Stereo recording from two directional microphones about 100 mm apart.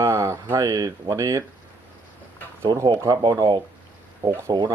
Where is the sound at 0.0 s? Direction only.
30° right (ahead or behind).